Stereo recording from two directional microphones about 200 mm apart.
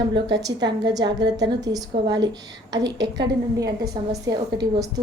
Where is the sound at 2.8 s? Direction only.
60° right (ahead or behind).